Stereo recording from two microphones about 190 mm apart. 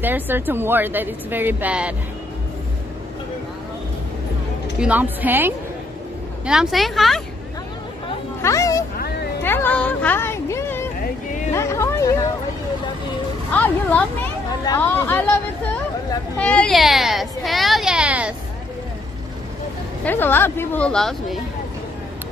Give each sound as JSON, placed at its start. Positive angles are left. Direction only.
{"t": 0.0, "sound": "a woman's voice", "side_deg": -10}
{"t": 4.7, "sound": "a woman's voice", "side_deg": -5}
{"t": 8.4, "sound": "a sound", "side_deg": 15}
{"t": 13.5, "sound": "speech", "side_deg": 10}
{"t": 20.1, "sound": "speech", "side_deg": 10}